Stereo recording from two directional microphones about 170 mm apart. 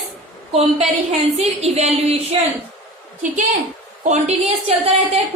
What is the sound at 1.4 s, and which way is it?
Speech, 40° right (ahead or behind).